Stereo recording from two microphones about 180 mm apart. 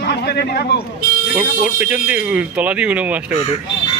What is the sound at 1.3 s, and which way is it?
Speech, 10° right (ahead or behind).